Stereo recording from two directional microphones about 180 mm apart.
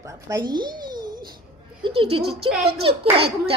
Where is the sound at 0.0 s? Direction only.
20° right (ahead or behind).